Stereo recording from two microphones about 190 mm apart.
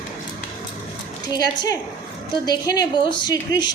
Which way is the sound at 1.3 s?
20° left (ahead or behind).